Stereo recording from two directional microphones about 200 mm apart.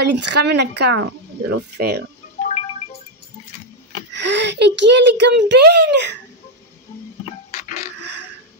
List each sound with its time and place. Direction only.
0.0 s a child's voice: 60° right (ahead or behind)
1.8 s speech: 50° right (ahead or behind)
4.1 s a child's voice: 60° right (ahead or behind)